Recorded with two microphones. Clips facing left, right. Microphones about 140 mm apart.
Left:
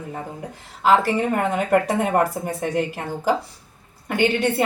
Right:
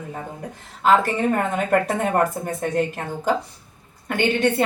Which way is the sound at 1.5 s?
10° left (ahead or behind).